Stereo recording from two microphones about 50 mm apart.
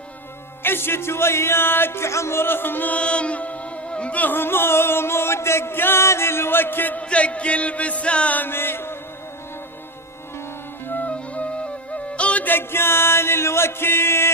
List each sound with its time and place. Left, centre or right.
0.6 s music: left
2.9 s music: left
4.2 s music: left
7.0 s music: left
8.4 s music: left
11.0 s flute: left
12.1 s music: left
12.5 s music: left